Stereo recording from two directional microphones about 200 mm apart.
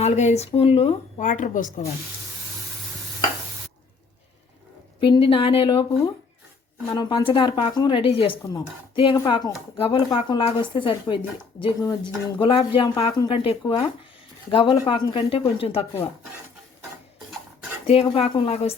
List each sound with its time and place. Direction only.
0.0 s a woman's voice: 35° left (ahead or behind)
4.9 s speech: 25° left (ahead or behind)
6.9 s speech: 25° left (ahead or behind)
17.8 s a woman's voice: 30° left (ahead or behind)